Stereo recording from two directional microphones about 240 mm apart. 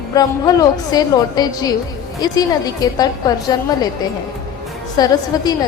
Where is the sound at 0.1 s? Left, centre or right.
Centre.